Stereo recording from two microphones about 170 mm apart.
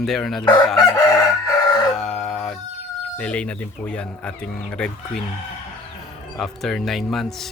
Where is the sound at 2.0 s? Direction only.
5° left (ahead or behind).